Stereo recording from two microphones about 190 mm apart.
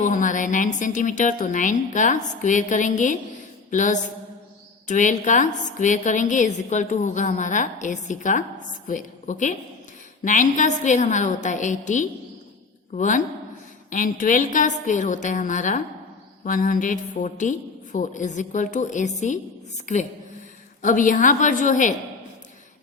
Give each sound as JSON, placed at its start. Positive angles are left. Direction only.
{"t": 0.0, "sound": "a woman's voice", "side_deg": 40}